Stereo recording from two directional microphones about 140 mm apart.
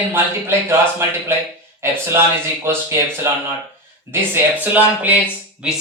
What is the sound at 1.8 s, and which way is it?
Speech, 20° right (ahead or behind).